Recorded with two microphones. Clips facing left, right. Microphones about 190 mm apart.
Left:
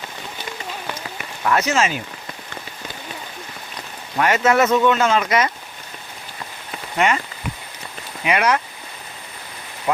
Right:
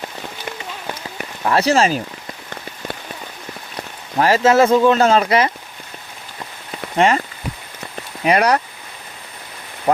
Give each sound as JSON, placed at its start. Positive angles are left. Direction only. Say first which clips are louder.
{"t": 1.5, "sound": "speech", "louder": "right 4 dB", "side_deg": -35}
{"t": 4.2, "sound": "speech", "louder": "right 4 dB", "side_deg": -30}
{"t": 6.9, "sound": "speech", "louder": "right 4 dB", "side_deg": -35}
{"t": 8.2, "sound": "speech", "louder": "right 4 dB", "side_deg": -35}